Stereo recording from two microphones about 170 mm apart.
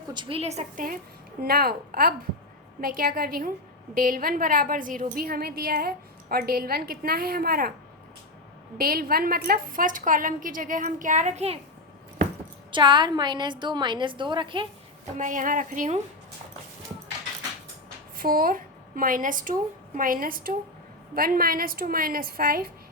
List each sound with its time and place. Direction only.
0.1 s a woman's voice: 30° right (ahead or behind); by 0.9 s 45° right (ahead or behind)
1.4 s a woman's voice: 60° right (ahead or behind)
8.8 s a woman's voice: 60° right (ahead or behind); by 11.6 s 40° right (ahead or behind)
12.7 s a woman's voice: 25° right (ahead or behind)
15.2 s a woman's voice: 50° right (ahead or behind)
18.2 s a woman's voice: 60° right (ahead or behind)